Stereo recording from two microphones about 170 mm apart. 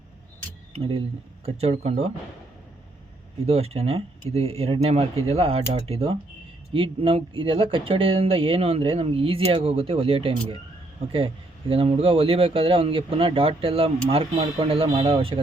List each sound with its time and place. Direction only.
0.7 s speech: 35° right (ahead or behind)
3.4 s speech: 35° right (ahead or behind)
11.7 s speech: 35° right (ahead or behind)